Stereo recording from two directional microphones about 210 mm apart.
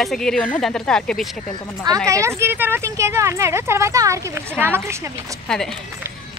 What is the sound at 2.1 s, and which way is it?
Speech, 15° right (ahead or behind).